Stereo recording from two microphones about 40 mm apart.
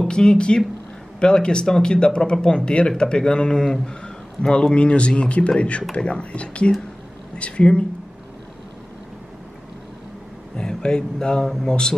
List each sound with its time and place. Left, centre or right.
0.1 s speech: left
10.5 s speech: left